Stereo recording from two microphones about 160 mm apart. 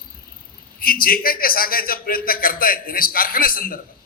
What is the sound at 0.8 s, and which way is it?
A man's voice, 65° left (ahead or behind).